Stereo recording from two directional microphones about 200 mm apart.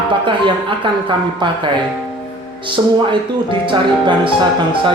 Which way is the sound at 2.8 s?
15° right (ahead or behind).